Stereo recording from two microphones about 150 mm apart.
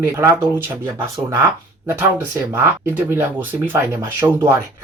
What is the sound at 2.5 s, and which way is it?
Speech, 15° right (ahead or behind).